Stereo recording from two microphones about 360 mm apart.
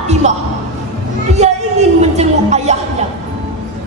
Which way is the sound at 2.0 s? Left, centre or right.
Centre.